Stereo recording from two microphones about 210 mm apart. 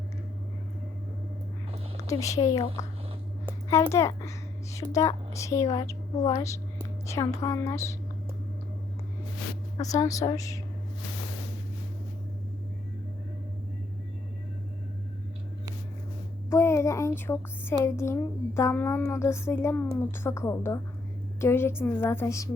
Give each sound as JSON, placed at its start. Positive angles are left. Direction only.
{"t": 2.0, "sound": "a child's voice", "side_deg": 15}
{"t": 9.7, "sound": "a child's voice", "side_deg": 15}
{"t": 16.5, "sound": "a child's voice", "side_deg": 10}